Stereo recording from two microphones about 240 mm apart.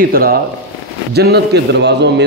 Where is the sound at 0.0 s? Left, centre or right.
Right.